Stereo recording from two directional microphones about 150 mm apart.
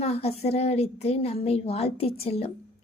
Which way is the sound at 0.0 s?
45° left (ahead or behind).